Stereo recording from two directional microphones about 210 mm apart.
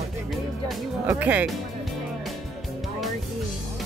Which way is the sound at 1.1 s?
10° right (ahead or behind).